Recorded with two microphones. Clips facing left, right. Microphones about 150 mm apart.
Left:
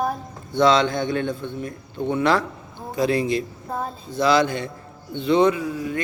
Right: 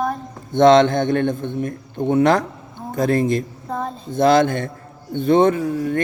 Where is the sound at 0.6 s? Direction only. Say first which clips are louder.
Right 6 dB; 50° right (ahead or behind).